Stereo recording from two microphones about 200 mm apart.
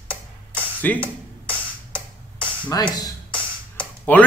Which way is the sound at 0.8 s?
10° left (ahead or behind).